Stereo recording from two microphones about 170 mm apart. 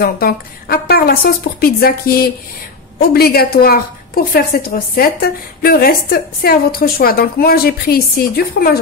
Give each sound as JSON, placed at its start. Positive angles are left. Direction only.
{"t": 0.0, "sound": "a woman's voice", "side_deg": 60}